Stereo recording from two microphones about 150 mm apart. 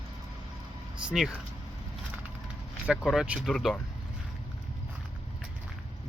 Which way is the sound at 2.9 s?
5° right (ahead or behind).